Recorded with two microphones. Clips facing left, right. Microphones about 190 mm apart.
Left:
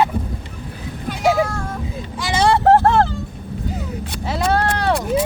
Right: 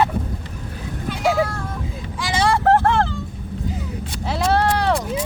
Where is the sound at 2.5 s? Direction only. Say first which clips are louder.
Left 3 dB; 30° left (ahead or behind).